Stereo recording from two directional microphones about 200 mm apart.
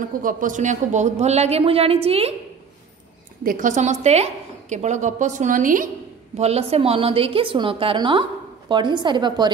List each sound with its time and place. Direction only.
0.2 s a woman's voice: 40° right (ahead or behind)
3.4 s a woman's voice: 40° right (ahead or behind)
6.3 s a woman's voice: 30° right (ahead or behind)